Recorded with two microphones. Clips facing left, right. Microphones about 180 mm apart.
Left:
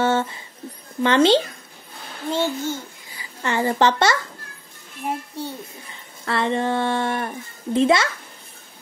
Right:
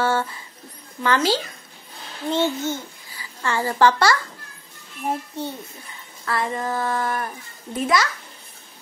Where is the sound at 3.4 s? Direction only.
20° left (ahead or behind).